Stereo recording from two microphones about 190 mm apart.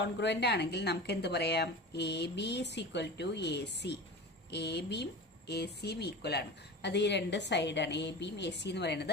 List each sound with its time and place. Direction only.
0.0 s a woman's voice: 65° left (ahead or behind)